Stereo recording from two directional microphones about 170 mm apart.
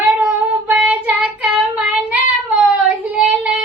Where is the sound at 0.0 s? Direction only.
10° right (ahead or behind).